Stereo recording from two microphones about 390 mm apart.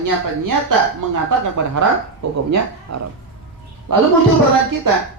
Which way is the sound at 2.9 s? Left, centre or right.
Right.